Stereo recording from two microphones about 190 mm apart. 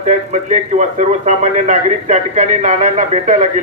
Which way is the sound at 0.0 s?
40° right (ahead or behind).